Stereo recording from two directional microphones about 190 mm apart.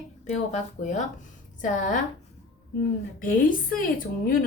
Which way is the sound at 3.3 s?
45° left (ahead or behind).